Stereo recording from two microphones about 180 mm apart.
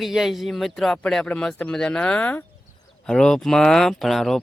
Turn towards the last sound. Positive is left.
turn(degrees=0)  # may be behind; listen again after turning